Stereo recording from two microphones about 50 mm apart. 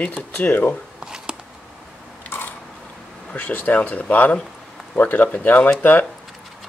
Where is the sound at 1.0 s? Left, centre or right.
Centre.